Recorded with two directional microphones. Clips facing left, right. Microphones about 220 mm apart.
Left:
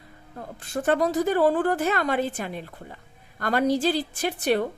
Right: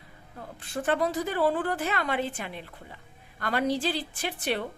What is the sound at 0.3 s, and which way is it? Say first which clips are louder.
A woman's voice: left 4 dB; 45° left (ahead or behind).